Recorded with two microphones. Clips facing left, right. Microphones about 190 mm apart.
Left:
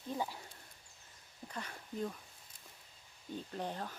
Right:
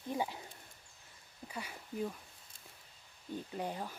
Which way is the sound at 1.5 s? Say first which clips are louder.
Right 1 dB; 10° right (ahead or behind).